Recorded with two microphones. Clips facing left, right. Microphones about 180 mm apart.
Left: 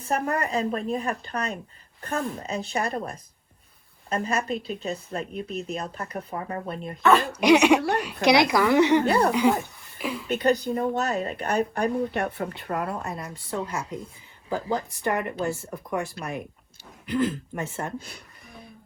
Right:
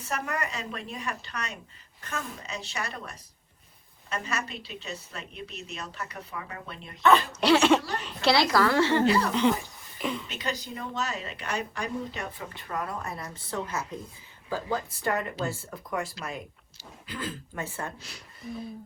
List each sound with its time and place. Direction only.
0.1 s speech: 35° left (ahead or behind)
7.3 s a woman's voice: 15° left (ahead or behind)
7.8 s a woman's voice: 60° left (ahead or behind)
8.2 s a woman's voice: 15° left (ahead or behind)
9.0 s a woman's voice: 60° left (ahead or behind)
9.3 s a woman's voice: 10° left (ahead or behind)
10.2 s a woman's voice: 60° left (ahead or behind)
12.8 s a woman's voice: 25° left (ahead or behind)
16.2 s speech: 45° left (ahead or behind)
17.1 s speech: 20° left (ahead or behind)